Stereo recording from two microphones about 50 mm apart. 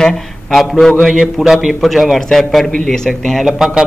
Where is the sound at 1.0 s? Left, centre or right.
Centre.